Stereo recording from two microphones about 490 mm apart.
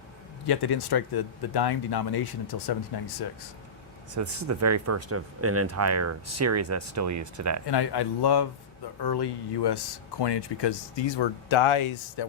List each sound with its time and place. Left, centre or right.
0.4 s speech: left
4.1 s speech: right
7.7 s speech: left